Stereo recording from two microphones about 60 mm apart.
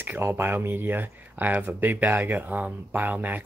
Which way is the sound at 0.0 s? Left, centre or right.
Right.